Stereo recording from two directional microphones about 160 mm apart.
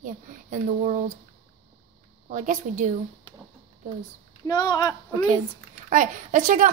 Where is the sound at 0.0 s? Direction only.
55° right (ahead or behind).